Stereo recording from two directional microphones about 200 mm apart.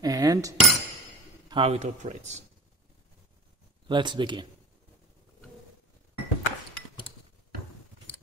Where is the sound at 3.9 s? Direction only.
25° right (ahead or behind).